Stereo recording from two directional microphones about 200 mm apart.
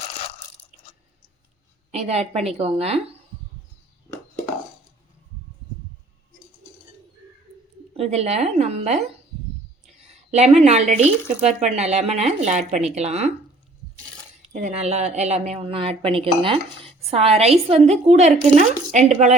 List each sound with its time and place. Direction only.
1.9 s a woman's voice: 30° right (ahead or behind)
7.9 s a woman's voice: 30° right (ahead or behind)
10.1 s a woman's voice: 35° right (ahead or behind)
14.5 s a woman's voice: 35° right (ahead or behind)